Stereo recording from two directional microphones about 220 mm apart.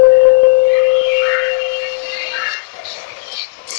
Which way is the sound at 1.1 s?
90° left.